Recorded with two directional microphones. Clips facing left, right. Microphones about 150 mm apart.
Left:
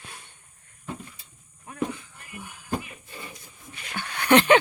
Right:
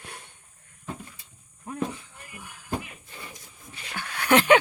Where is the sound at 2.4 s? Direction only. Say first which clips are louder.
Left 5 dB; centre (ahead or behind).